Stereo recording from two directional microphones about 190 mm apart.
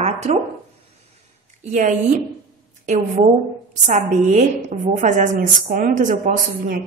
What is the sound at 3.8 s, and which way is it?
A woman's voice, 40° right (ahead or behind).